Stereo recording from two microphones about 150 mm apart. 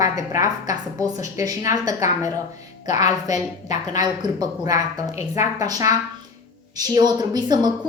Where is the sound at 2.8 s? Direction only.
50° left (ahead or behind).